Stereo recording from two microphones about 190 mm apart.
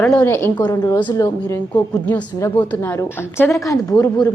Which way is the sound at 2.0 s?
5° left (ahead or behind).